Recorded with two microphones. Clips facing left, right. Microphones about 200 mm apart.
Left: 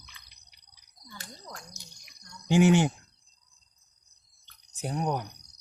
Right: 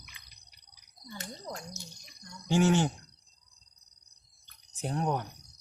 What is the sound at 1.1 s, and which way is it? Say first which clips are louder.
Cricket: right 5 dB; 20° right (ahead or behind).